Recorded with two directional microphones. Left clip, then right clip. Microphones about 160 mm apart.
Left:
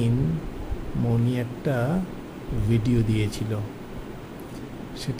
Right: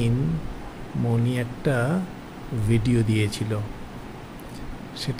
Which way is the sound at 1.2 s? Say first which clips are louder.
Right 1 dB; 15° right (ahead or behind).